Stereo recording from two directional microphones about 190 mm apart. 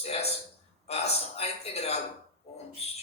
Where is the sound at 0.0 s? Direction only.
35° left (ahead or behind).